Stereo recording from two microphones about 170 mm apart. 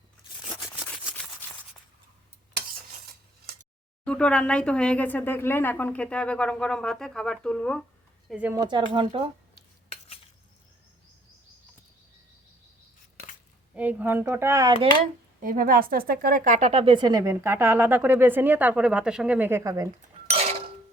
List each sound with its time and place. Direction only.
0.9 s a sound: 10° left (ahead or behind)
4.0 s speech: 5° left (ahead or behind)
8.3 s speech: 10° right (ahead or behind)
8.5 s speech: 30° right (ahead or behind)
13.7 s speech: 10° right (ahead or behind)
15.4 s speech: 55° right (ahead or behind); by 19.9 s 20° right (ahead or behind)